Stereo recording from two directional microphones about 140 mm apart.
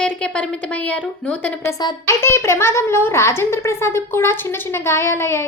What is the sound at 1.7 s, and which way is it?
A woman's voice, 25° left (ahead or behind).